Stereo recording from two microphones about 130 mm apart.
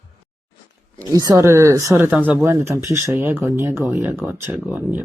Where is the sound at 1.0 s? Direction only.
25° right (ahead or behind).